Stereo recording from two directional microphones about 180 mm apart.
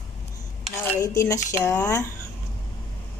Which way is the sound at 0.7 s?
15° left (ahead or behind).